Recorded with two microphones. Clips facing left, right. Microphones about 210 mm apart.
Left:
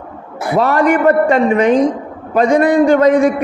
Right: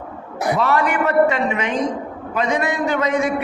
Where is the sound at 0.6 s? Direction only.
45° left (ahead or behind).